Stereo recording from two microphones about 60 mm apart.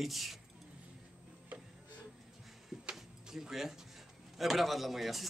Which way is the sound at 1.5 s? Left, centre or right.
Right.